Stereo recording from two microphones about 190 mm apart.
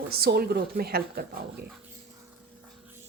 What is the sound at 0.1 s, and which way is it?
Speech, 55° right (ahead or behind).